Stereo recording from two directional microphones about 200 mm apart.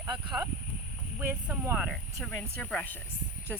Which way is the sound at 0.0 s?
15° right (ahead or behind).